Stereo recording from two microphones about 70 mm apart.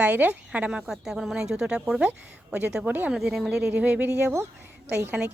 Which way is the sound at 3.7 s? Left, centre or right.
Right.